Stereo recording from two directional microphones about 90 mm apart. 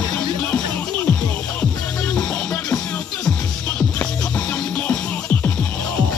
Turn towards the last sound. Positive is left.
turn(degrees=20)  # may be behind; listen again after turning